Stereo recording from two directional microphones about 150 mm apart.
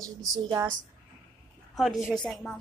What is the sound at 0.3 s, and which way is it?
Speech, 25° right (ahead or behind).